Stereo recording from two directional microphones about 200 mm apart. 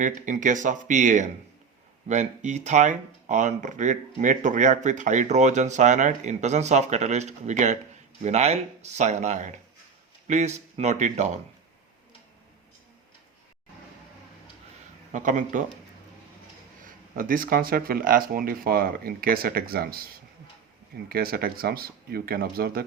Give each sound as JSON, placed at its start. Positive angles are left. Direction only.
{"t": 0.0, "sound": "speech", "side_deg": -40}
{"t": 15.1, "sound": "speech", "side_deg": -40}
{"t": 16.8, "sound": "speech", "side_deg": -45}
{"t": 21.1, "sound": "speech", "side_deg": -50}